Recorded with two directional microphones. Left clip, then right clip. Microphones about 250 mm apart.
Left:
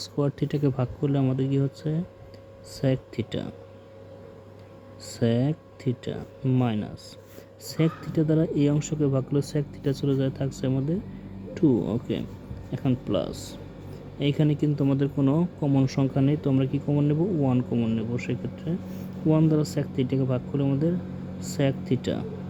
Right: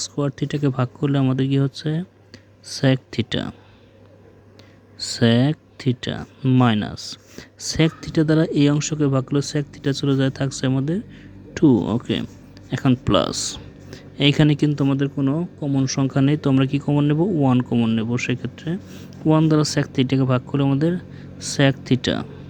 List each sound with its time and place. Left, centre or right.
0.0 s speech: centre
3.2 s speech: right
4.9 s speech: right